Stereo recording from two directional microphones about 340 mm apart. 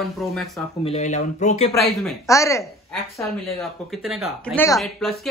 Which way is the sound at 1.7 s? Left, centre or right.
Centre.